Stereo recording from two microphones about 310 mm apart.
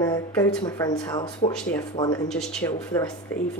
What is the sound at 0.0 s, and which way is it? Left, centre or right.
Speech, centre.